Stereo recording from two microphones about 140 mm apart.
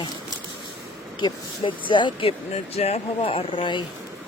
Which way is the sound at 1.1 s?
35° left (ahead or behind).